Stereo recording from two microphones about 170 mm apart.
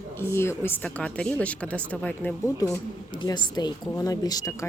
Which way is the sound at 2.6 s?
20° left (ahead or behind).